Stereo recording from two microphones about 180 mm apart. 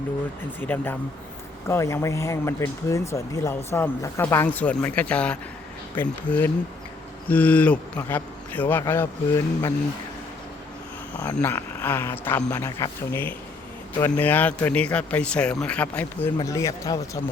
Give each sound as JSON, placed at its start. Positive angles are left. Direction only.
{"t": 0.6, "sound": "speech", "side_deg": 10}
{"t": 7.3, "sound": "speech", "side_deg": 10}
{"t": 11.3, "sound": "speech", "side_deg": 10}